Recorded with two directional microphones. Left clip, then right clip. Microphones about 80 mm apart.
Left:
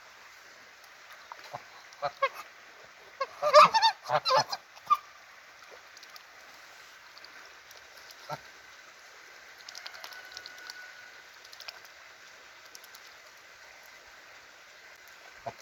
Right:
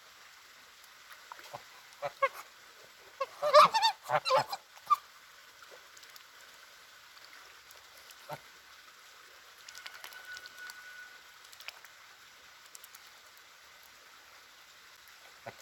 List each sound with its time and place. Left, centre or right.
1.5 s a sound: right
2.2 s goose: right
9.8 s rain: right